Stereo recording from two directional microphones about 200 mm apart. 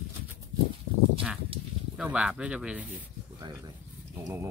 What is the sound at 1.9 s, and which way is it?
Speech, 5° right (ahead or behind).